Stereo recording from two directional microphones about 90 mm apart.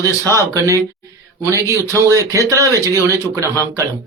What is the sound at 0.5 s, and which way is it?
Speech, 35° right (ahead or behind).